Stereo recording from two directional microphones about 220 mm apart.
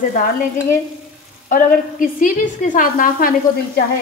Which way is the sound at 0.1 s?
40° left (ahead or behind).